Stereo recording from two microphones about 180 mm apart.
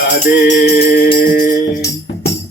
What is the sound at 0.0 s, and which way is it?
Music, 55° left (ahead or behind).